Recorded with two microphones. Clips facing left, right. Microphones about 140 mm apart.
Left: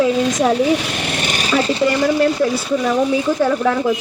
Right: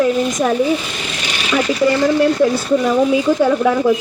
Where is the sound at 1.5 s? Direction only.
30° left (ahead or behind).